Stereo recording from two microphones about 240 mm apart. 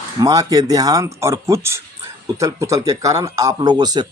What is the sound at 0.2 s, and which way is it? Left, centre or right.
Speech, centre.